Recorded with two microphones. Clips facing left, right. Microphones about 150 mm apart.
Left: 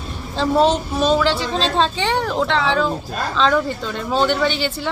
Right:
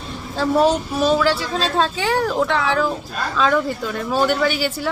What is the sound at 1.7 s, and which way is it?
A woman's voice, 5° right (ahead or behind).